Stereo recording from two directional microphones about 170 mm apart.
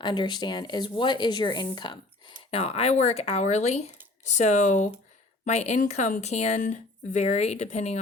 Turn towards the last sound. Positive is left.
turn(degrees=40)  # may be behind; listen again after turning